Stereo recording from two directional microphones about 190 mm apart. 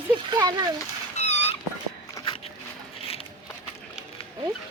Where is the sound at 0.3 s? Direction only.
20° right (ahead or behind).